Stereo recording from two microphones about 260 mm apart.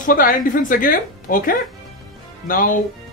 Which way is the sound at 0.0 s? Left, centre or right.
Left.